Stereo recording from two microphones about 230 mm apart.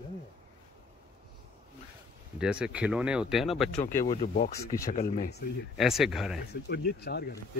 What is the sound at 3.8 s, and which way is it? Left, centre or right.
Speech, left.